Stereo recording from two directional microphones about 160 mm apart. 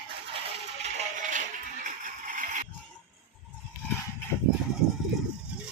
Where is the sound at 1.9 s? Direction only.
55° right (ahead or behind).